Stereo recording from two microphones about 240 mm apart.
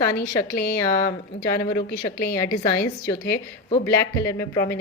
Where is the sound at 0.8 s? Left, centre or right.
Centre.